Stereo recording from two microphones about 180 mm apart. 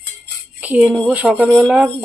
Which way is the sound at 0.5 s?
10° right (ahead or behind).